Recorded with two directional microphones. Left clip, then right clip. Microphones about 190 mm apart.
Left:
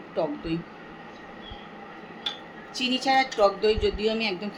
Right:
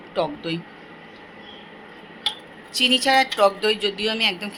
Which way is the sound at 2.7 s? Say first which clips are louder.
Right 6 dB; 10° right (ahead or behind).